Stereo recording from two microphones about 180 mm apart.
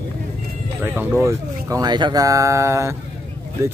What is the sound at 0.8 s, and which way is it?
Speech, 10° right (ahead or behind).